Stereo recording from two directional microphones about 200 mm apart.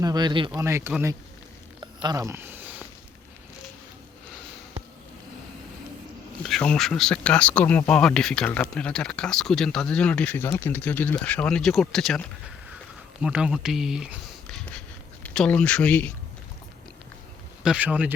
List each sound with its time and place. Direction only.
0.0 s speech: 20° right (ahead or behind)
0.5 s speech: 10° right (ahead or behind)
1.8 s a sound: 20° right (ahead or behind)
6.4 s speech: 5° left (ahead or behind)
17.6 s speech: 5° right (ahead or behind)